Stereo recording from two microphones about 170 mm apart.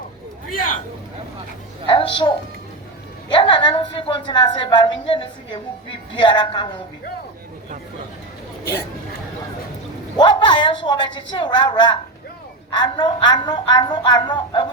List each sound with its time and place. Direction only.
1.9 s a woman's voice: 30° left (ahead or behind)
3.3 s a woman's voice: 30° left (ahead or behind)
10.2 s a woman's voice: 25° left (ahead or behind)